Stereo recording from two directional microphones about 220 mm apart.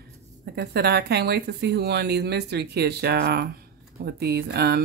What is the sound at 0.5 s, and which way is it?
Speech, 50° right (ahead or behind).